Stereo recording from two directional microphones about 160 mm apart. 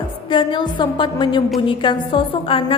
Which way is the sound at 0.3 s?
30° left (ahead or behind).